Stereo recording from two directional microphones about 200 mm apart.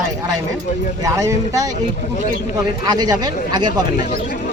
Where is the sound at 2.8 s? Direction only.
20° right (ahead or behind).